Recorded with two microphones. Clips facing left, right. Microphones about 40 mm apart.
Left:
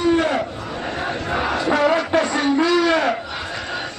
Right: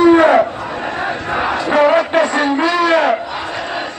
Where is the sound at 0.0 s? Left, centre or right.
Right.